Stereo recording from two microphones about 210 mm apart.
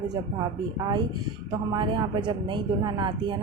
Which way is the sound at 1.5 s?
20° right (ahead or behind).